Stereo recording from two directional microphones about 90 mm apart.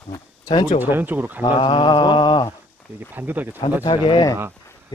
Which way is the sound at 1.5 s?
60° left (ahead or behind).